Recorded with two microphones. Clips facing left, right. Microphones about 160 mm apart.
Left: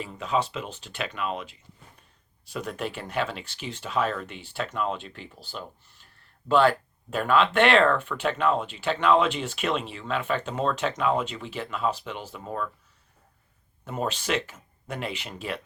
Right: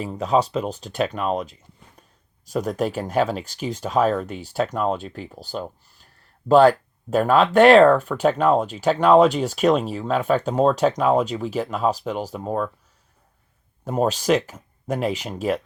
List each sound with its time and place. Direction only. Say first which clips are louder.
0.0 s speech: right 7 dB; 40° right (ahead or behind)
13.8 s speech: right 9 dB; 40° right (ahead or behind)